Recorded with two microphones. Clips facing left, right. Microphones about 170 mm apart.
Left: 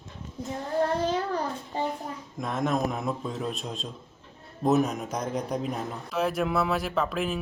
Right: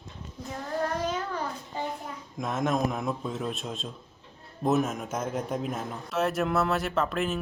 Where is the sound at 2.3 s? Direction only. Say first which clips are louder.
Even; centre (ahead or behind).